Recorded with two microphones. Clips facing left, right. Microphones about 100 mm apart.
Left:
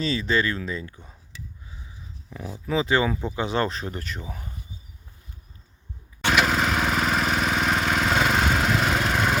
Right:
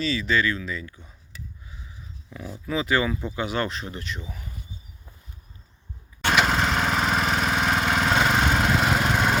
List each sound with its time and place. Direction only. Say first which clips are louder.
0.0 s speech: even; 35° left (ahead or behind)
2.6 s speech: left 2 dB; 30° left (ahead or behind)
6.2 s lawn mower: even; centre (ahead or behind)